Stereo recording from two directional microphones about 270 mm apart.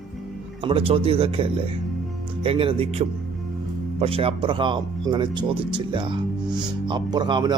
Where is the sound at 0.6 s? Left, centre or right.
Centre.